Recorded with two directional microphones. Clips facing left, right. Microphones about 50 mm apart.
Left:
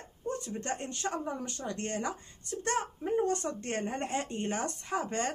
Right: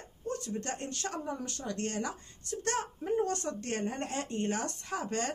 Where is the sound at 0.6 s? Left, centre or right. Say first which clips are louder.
Left 1 dB; left.